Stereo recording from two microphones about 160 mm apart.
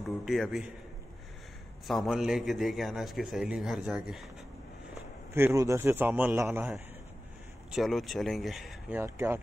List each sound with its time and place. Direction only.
0.2 s a man's voice: centre (ahead or behind)
1.9 s a man's voice: centre (ahead or behind)
5.3 s a man's voice: 15° right (ahead or behind)
7.7 s a man's voice: centre (ahead or behind)